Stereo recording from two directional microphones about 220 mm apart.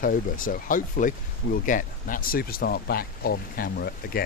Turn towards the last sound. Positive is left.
turn(degrees=45)  # may be behind; listen again after turning